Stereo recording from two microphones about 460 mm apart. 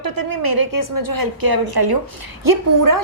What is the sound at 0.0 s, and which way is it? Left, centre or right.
A woman's voice, right.